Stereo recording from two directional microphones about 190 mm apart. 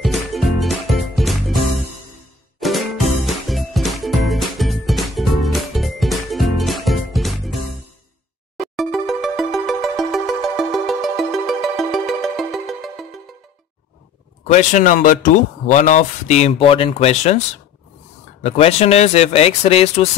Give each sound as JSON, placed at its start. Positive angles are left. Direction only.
{"t": 0.0, "sound": "music", "side_deg": 0}
{"t": 8.5, "sound": "music", "side_deg": 0}
{"t": 14.5, "sound": "speech", "side_deg": 40}
{"t": 18.4, "sound": "speech", "side_deg": 35}